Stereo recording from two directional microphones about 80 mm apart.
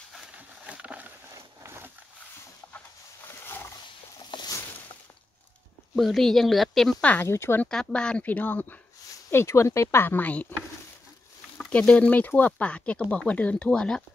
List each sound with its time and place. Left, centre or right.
0.7 s a sound: centre
1.3 s a sound: right
3.3 s roaring cats: left
4.2 s a sound: left
5.9 s speech: centre
7.0 s speech: centre
7.2 s speech: left
7.6 s speech: centre
9.3 s speech: left
10.0 s speech: left
11.7 s speech: centre